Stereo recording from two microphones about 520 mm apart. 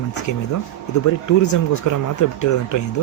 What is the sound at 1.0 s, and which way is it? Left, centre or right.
Speech, left.